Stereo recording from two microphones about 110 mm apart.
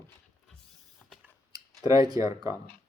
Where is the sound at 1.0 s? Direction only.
5° left (ahead or behind).